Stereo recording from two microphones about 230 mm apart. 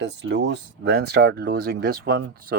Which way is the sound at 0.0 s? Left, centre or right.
Right.